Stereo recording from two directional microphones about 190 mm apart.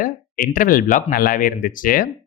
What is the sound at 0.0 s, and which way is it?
Speech, 45° left (ahead or behind).